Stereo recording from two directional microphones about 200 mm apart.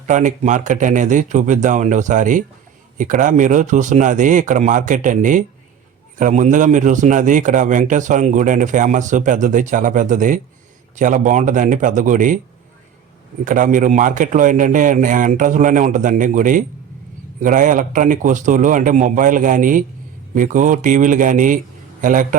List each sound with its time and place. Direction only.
0.1 s a man's voice: 40° right (ahead or behind)
13.4 s a man's voice: 40° right (ahead or behind)